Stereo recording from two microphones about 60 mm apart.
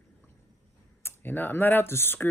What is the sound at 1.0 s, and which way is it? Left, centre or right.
Speech, left.